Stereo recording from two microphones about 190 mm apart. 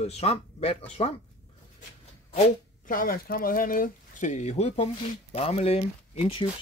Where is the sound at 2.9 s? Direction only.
50° left (ahead or behind).